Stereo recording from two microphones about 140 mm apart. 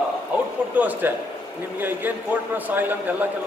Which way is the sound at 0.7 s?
10° right (ahead or behind).